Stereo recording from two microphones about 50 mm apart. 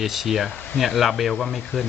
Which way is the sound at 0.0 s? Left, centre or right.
Centre.